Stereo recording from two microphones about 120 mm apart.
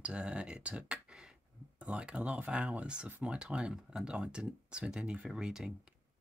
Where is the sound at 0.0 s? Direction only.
10° right (ahead or behind).